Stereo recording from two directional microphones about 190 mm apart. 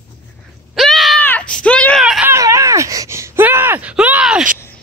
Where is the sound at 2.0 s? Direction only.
5° right (ahead or behind).